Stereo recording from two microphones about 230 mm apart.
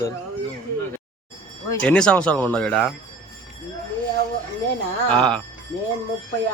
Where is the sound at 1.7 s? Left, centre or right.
Centre.